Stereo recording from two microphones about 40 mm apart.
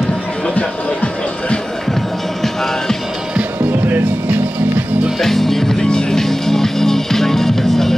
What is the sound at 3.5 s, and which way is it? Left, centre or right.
Music, right.